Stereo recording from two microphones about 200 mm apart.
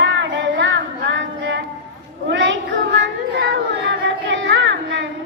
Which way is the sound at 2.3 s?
65° right (ahead or behind).